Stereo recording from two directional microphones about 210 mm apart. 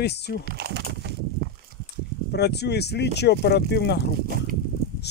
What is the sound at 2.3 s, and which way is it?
Speech, 50° left (ahead or behind).